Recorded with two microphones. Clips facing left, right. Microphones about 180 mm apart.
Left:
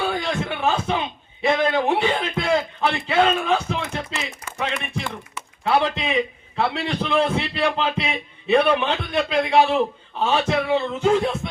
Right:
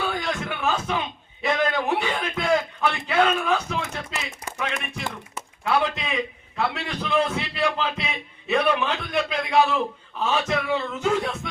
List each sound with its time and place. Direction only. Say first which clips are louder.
0.1 s a sound: left 3 dB; 30° left (ahead or behind)
1.4 s a man's voice: left 4 dB; 30° left (ahead or behind)
4.7 s speech: left 3 dB; 45° right (ahead or behind)
5.6 s a man's voice: left 3 dB; 30° left (ahead or behind)